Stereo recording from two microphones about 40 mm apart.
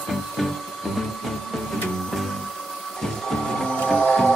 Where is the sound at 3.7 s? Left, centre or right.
Left.